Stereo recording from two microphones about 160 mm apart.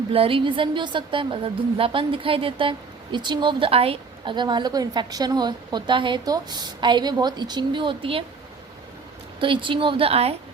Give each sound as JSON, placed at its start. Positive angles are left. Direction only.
{"t": 0.1, "sound": "a woman's voice", "side_deg": -35}
{"t": 9.4, "sound": "a woman's voice", "side_deg": -30}